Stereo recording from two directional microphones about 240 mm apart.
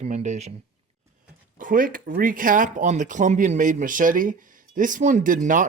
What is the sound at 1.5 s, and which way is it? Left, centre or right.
Speech, right.